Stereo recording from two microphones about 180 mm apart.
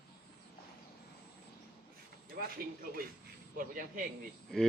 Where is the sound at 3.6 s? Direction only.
50° right (ahead or behind).